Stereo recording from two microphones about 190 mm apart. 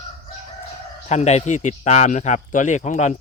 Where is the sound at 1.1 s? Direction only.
35° left (ahead or behind).